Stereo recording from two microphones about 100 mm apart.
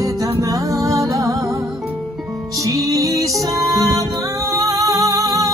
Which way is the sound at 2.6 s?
35° right (ahead or behind).